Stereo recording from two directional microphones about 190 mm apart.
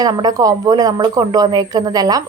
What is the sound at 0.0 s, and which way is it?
A woman's voice, 20° right (ahead or behind).